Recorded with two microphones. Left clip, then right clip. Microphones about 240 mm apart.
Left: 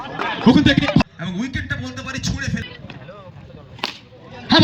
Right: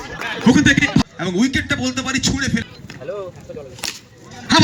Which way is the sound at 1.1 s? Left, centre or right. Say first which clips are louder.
Right 8 dB; right.